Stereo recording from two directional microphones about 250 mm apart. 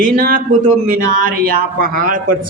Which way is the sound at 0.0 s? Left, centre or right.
Right.